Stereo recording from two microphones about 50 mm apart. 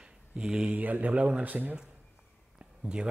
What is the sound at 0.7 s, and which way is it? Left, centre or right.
Speech, right.